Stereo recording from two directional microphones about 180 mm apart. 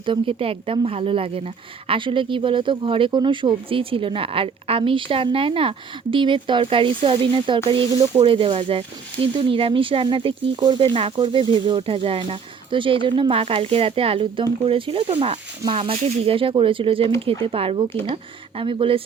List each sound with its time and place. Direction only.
0.0 s speech: 30° right (ahead or behind)